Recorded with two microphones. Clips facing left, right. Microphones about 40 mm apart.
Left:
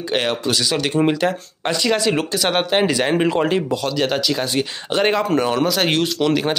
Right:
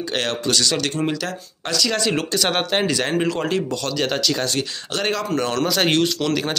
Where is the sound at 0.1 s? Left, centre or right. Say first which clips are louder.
Left 3 dB; centre.